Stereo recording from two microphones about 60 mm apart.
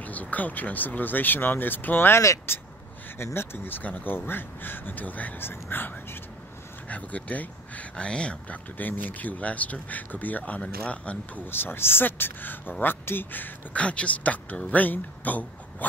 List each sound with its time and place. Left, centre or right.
0.0 s speech: left
6.9 s speech: left
8.7 s speech: left
11.5 s speech: left